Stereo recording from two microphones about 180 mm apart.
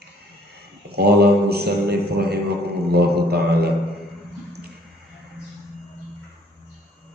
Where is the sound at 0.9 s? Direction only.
60° right (ahead or behind).